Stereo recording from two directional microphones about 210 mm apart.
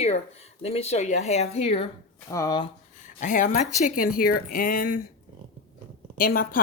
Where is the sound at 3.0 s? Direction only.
35° left (ahead or behind).